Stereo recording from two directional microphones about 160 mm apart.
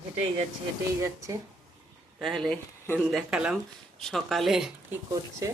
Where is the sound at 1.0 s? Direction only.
20° right (ahead or behind).